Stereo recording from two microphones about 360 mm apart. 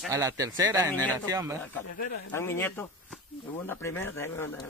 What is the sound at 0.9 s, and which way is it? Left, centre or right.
Speech, centre.